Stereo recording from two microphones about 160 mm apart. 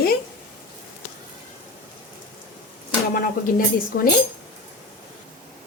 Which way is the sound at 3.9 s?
70° left (ahead or behind).